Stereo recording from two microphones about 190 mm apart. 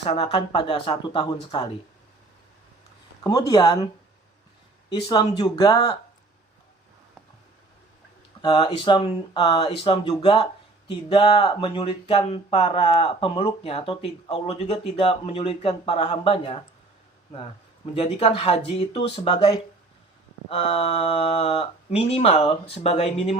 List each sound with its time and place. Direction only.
0.0 s speech: 30° left (ahead or behind)
3.2 s speech: 20° left (ahead or behind)
4.9 s speech: 30° left (ahead or behind)
8.4 s speech: 25° left (ahead or behind)
17.9 s speech: 30° left (ahead or behind)